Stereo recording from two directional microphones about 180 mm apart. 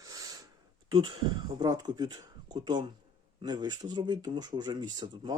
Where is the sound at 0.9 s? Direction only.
25° right (ahead or behind).